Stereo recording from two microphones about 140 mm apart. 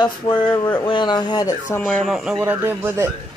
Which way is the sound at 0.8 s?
35° left (ahead or behind).